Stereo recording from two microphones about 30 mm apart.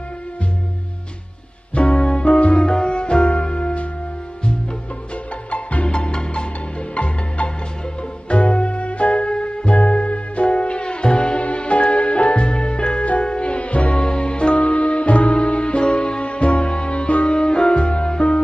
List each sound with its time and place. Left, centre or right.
1.8 s music: left
5.5 s music: left
5.9 s music: left
7.0 s music: left
9.2 s music: left
14.0 s music: left